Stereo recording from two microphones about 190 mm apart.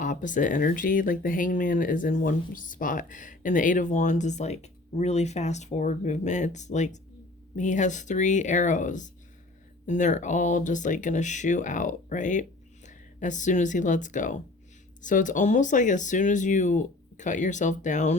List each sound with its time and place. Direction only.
0.0 s speech: 40° left (ahead or behind)